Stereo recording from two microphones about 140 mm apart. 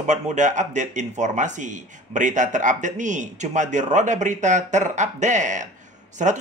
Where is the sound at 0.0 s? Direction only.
60° right (ahead or behind).